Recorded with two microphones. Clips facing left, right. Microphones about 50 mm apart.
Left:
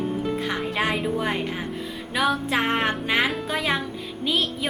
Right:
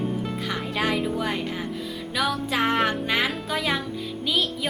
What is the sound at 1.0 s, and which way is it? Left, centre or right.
A woman's voice, centre.